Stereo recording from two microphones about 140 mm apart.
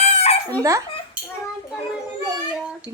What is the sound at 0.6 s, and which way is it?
Speech, 25° right (ahead or behind).